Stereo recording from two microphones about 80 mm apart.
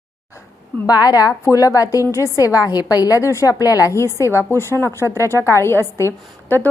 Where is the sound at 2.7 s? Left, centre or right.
Left.